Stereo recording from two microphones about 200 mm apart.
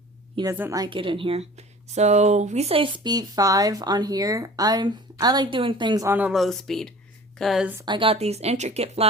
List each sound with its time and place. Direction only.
0.5 s a woman's voice: 15° right (ahead or behind)
7.9 s speech: 25° right (ahead or behind)